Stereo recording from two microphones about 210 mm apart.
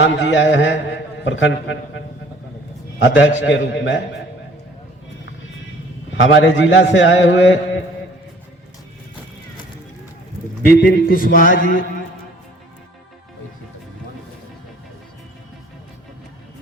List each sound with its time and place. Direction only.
0.0 s a man's voice: 60° left (ahead or behind)
3.0 s a man's voice: 65° left (ahead or behind)
6.1 s a man's voice: 65° left (ahead or behind)
10.7 s a man's voice: 50° left (ahead or behind)
11.3 s a sound: 40° left (ahead or behind)